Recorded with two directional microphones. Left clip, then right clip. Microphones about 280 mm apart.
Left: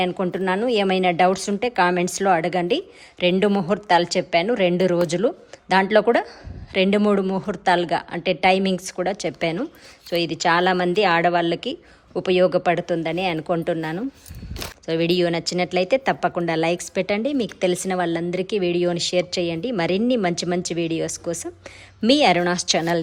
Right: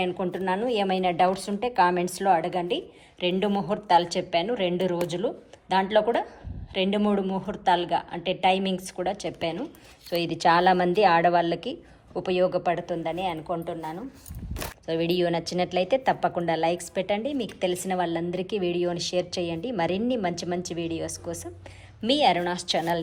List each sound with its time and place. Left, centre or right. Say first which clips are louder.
0.0 s a woman's voice: left 5 dB; centre